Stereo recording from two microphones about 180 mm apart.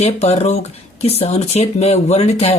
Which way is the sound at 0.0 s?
35° left (ahead or behind).